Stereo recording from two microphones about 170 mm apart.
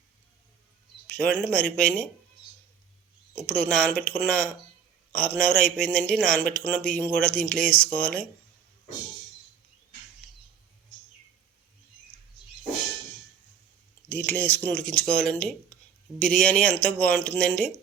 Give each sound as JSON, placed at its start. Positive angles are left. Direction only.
{"t": 1.1, "sound": "speech", "side_deg": 5}
{"t": 3.6, "sound": "speech", "side_deg": 5}
{"t": 5.5, "sound": "speech", "side_deg": 55}
{"t": 5.8, "sound": "speech", "side_deg": 5}
{"t": 14.1, "sound": "speech", "side_deg": 15}